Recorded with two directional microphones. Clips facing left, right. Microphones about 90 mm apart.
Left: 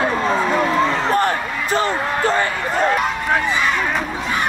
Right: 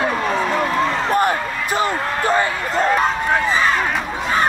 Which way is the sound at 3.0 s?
35° right (ahead or behind).